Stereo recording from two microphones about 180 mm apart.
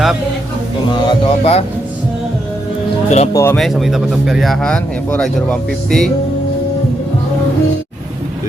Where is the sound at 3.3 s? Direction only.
15° left (ahead or behind).